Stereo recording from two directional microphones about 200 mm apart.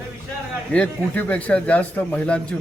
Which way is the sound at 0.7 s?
5° left (ahead or behind).